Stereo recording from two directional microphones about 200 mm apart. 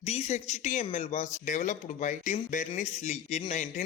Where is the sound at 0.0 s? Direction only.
35° left (ahead or behind).